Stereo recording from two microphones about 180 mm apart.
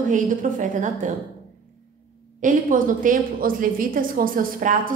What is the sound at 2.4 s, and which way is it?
A woman's voice, 50° right (ahead or behind).